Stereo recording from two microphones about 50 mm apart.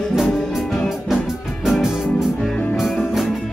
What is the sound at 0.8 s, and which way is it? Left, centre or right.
Music, centre.